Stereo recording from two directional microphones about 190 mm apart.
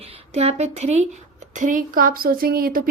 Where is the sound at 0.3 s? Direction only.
35° right (ahead or behind).